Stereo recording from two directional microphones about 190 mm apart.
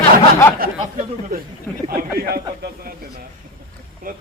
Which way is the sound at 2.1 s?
55° right (ahead or behind).